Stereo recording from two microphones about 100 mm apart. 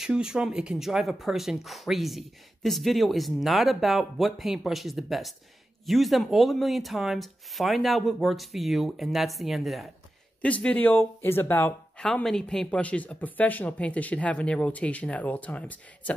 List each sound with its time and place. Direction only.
0.0 s speech: 5° right (ahead or behind)
10.6 s speech: 15° left (ahead or behind)
12.0 s speech: 5° left (ahead or behind)